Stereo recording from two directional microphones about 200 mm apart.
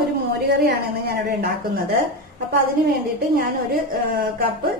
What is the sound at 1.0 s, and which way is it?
Speech, 50° right (ahead or behind).